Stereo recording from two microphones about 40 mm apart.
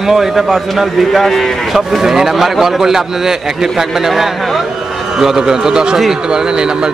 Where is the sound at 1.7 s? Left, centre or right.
Centre.